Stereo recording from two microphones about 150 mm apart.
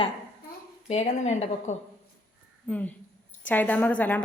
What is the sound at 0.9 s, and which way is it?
Speech, 50° left (ahead or behind).